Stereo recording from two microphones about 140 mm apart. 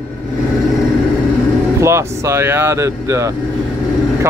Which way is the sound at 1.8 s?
20° right (ahead or behind).